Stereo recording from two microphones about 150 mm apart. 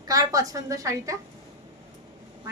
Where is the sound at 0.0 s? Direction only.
25° right (ahead or behind).